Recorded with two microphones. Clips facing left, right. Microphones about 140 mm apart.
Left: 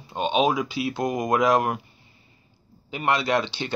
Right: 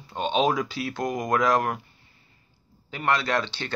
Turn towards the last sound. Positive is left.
turn(degrees=15)  # may be behind; listen again after turning